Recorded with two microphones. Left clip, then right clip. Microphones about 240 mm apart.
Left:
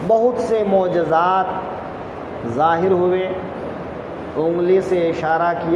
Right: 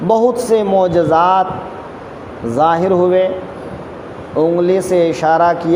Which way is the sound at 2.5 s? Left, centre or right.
Right.